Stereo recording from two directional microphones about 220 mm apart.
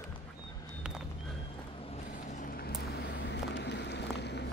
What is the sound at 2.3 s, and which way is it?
Vehicle, 40° left (ahead or behind).